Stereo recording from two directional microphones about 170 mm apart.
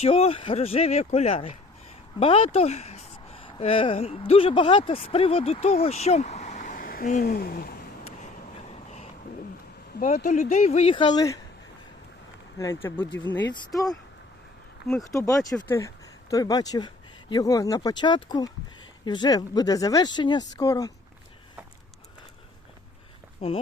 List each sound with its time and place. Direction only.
0.0 s speech: 35° left (ahead or behind); by 7.8 s 65° left (ahead or behind)
8.2 s vehicle: 40° left (ahead or behind)
10.0 s speech: 50° left (ahead or behind); by 11.3 s 25° left (ahead or behind)
12.5 s speech: 15° left (ahead or behind)
13.7 s speech: centre (ahead or behind)
15.0 s speech: 20° left (ahead or behind)
23.4 s speech: 35° left (ahead or behind)